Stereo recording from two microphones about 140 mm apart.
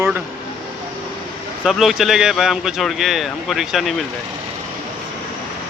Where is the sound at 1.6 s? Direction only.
Centre (ahead or behind).